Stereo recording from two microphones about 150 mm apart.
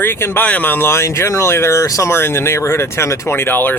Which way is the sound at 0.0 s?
15° left (ahead or behind).